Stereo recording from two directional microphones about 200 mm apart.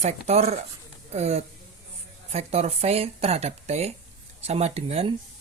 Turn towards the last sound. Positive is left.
turn(degrees=-30)  # may be behind; listen again after turning